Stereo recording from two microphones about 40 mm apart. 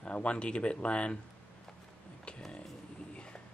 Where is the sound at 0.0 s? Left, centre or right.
Left.